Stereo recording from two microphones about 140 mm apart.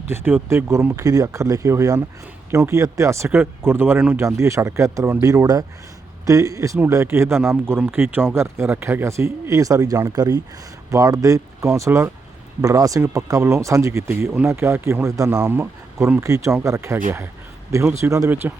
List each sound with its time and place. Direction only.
0.1 s speech: 15° right (ahead or behind)
18.0 s speech: 20° right (ahead or behind)